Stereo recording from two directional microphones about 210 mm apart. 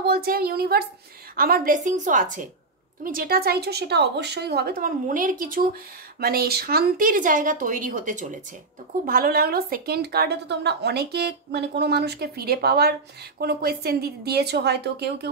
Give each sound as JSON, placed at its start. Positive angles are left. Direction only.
{"t": 0.0, "sound": "a woman's voice", "side_deg": -45}